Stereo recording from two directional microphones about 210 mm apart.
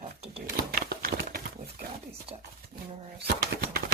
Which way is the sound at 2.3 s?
25° right (ahead or behind).